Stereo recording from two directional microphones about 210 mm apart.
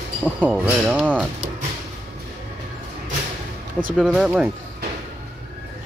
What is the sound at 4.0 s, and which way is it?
Speech, 5° right (ahead or behind).